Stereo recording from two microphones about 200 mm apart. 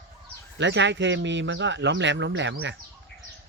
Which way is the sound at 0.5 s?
65° right (ahead or behind).